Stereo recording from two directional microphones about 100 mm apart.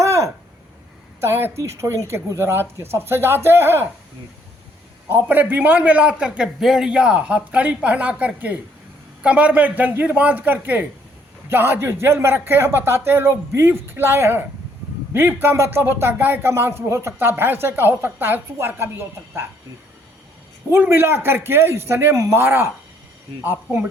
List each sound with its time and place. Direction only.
0.0 s a sound: 30° right (ahead or behind)
1.2 s speech: 20° right (ahead or behind)
5.0 s a man's voice: 20° right (ahead or behind)
20.7 s speech: 20° right (ahead or behind)